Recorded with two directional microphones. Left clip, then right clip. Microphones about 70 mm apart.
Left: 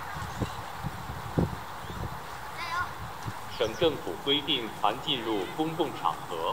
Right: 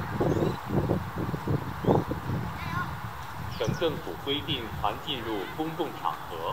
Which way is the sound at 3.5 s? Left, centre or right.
Left.